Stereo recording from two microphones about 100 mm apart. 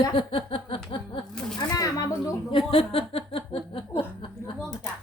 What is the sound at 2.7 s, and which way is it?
Chuckle, 65° left (ahead or behind).